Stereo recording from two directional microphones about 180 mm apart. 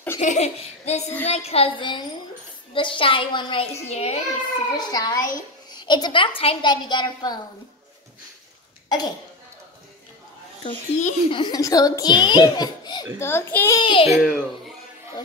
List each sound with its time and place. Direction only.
0.2 s a child's voice: 40° left (ahead or behind)
4.7 s a woman's voice: 20° left (ahead or behind)
10.6 s a child's voice: 35° left (ahead or behind)
11.3 s a woman's voice: 25° left (ahead or behind)
13.2 s a child's voice: 10° left (ahead or behind)
13.7 s a woman's voice: 25° left (ahead or behind)
14.1 s a child's voice: 5° right (ahead or behind)